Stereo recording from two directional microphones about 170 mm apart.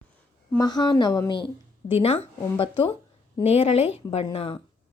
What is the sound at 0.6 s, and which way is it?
Speech, 25° left (ahead or behind).